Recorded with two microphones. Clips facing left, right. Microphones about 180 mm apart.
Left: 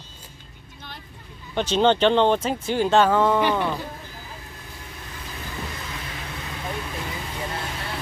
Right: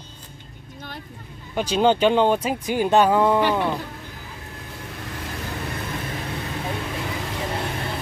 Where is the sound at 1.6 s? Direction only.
10° right (ahead or behind).